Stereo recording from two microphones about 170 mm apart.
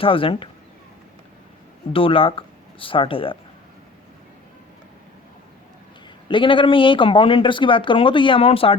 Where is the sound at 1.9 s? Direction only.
30° left (ahead or behind).